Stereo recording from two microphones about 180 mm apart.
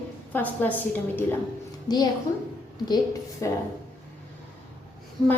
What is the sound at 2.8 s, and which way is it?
Speech, 20° left (ahead or behind).